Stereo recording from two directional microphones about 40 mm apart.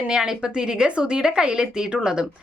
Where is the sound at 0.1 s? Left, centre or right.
Centre.